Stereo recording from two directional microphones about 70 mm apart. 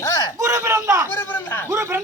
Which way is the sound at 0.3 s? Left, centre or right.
Right.